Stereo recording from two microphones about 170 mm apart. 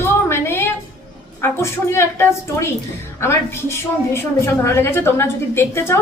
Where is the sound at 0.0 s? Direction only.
15° left (ahead or behind).